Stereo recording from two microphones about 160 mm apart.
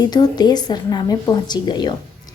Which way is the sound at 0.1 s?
25° left (ahead or behind).